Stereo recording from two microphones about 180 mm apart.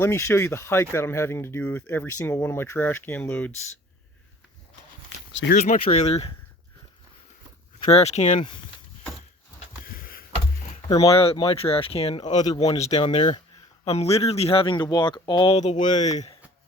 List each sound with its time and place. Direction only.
0.0 s speech: 15° left (ahead or behind)
5.3 s speech: 90° left
5.5 s speech: 40° left (ahead or behind)
7.9 s speech: 35° left (ahead or behind)
9.8 s a sound: 55° left (ahead or behind)
10.8 s speech: 20° left (ahead or behind)
11.1 s speech: 35° left (ahead or behind)
12.4 s speech: 20° left (ahead or behind)
15.5 s speech: 40° left (ahead or behind)